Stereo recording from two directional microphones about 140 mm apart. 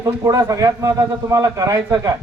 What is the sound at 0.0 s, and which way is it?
A man's voice, 25° right (ahead or behind).